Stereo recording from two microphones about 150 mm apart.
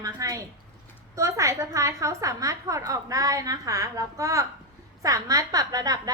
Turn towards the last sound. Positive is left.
turn(degrees=-25)  # may be behind; listen again after turning